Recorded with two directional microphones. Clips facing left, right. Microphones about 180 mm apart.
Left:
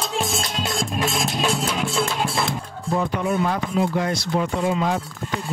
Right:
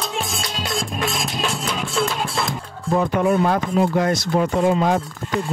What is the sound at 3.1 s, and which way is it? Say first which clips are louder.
Speech: right 5 dB; 55° right (ahead or behind).